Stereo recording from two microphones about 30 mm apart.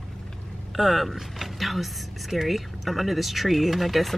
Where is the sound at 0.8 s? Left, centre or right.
Centre.